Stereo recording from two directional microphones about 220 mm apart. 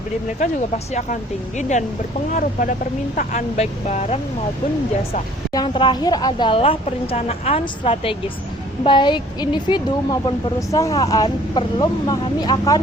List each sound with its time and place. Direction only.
0.9 s speech: 35° left (ahead or behind)
5.5 s a woman's voice: 20° left (ahead or behind)